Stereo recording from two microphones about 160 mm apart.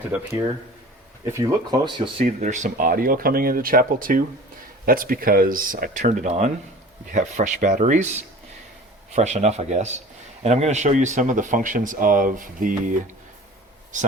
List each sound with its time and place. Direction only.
1.2 s speech: 20° right (ahead or behind)
2.2 s speech: 50° right (ahead or behind)